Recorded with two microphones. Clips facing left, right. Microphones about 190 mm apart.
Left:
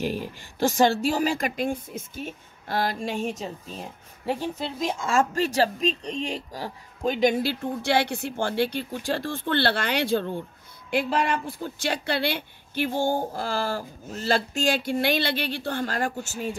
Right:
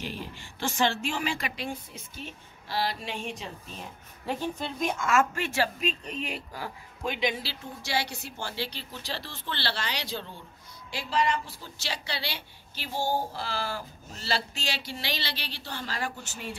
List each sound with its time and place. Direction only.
0.0 s speech: 45° left (ahead or behind)
4.3 s a woman's voice: 30° left (ahead or behind)